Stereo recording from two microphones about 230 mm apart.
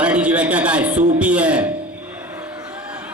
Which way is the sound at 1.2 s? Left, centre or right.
Centre.